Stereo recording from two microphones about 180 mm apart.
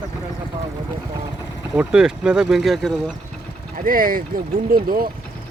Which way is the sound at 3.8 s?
50° right (ahead or behind).